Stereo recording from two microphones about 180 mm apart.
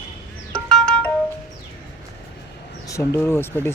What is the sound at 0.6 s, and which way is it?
Music, 5° left (ahead or behind).